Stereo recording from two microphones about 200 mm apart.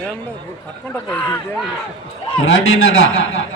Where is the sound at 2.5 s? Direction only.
90° left.